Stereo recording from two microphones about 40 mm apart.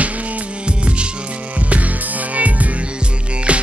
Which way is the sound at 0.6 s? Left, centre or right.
Right.